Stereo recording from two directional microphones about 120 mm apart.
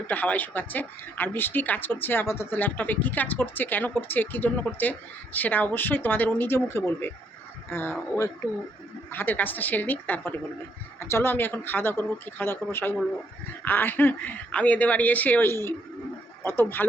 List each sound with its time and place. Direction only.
0.1 s speech: 15° left (ahead or behind)